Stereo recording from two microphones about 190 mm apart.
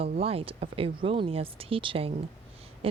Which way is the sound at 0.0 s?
30° right (ahead or behind).